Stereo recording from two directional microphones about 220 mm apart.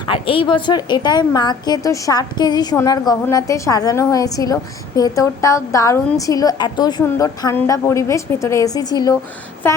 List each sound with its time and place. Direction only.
0.0 s a woman's voice: 20° left (ahead or behind)